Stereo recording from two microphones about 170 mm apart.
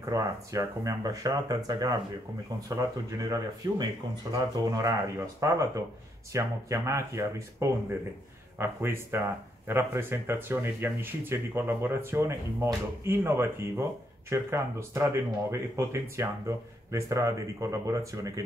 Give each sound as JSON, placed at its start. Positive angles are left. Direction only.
{"t": 0.0, "sound": "speech", "side_deg": -20}